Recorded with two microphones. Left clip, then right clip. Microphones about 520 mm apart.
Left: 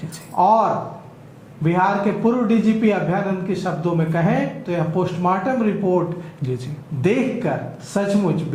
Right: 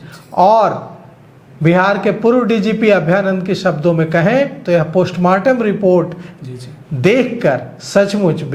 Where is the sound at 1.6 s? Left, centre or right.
Right.